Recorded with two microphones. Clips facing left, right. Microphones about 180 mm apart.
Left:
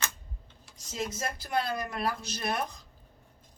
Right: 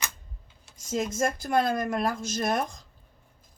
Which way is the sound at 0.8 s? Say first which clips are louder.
Right 7 dB; 50° right (ahead or behind).